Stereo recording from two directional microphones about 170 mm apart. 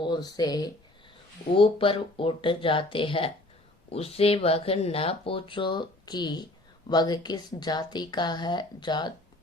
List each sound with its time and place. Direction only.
0.0 s speech: 25° left (ahead or behind)